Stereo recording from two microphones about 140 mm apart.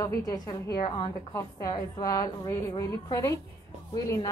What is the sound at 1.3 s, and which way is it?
A woman's voice, 20° left (ahead or behind).